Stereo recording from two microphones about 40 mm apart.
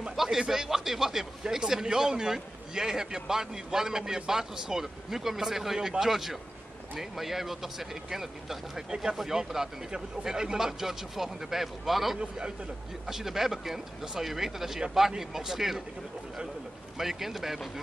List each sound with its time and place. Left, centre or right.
0.1 s a man's voice: centre
12.2 s a man's voice: centre
13.0 s a man's voice: centre
17.0 s a man's voice: centre